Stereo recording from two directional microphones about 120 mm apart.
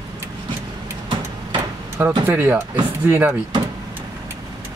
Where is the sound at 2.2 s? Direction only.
20° right (ahead or behind).